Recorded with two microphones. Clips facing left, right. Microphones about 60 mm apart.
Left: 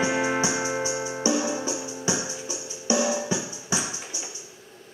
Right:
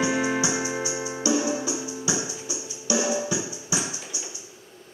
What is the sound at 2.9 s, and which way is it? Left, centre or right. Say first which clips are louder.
Music: left 2 dB; left.